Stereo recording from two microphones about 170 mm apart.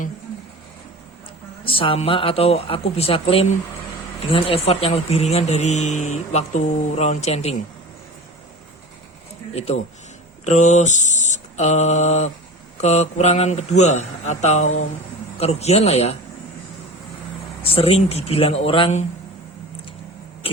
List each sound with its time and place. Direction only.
1.6 s a man's voice: 30° left (ahead or behind)
10.4 s mantra: 45° left (ahead or behind)
12.7 s a man's voice: 40° left (ahead or behind)
17.6 s a man's voice: 35° left (ahead or behind)